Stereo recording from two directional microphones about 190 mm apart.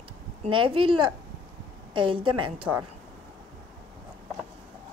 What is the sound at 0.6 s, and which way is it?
A woman's voice, 25° right (ahead or behind).